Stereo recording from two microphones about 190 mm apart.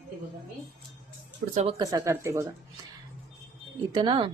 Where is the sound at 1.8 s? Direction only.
20° right (ahead or behind).